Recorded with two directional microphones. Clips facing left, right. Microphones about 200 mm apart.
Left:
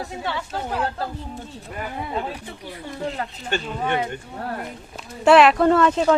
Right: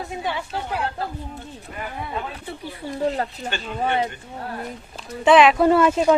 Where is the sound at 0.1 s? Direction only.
15° right (ahead or behind).